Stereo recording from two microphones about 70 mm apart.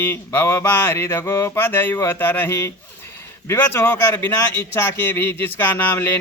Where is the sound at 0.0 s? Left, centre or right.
Left.